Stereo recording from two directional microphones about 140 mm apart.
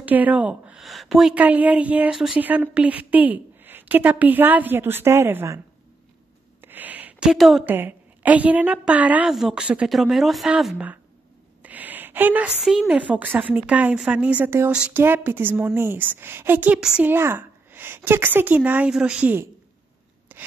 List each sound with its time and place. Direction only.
0.0 s speech: 10° right (ahead or behind)
6.6 s a sound: 15° right (ahead or behind)
7.6 s speech: 15° right (ahead or behind)
20.3 s rub: 15° right (ahead or behind)